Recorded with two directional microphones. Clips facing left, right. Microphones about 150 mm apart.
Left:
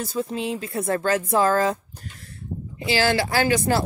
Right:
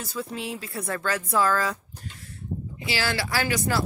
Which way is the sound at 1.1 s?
25° left (ahead or behind).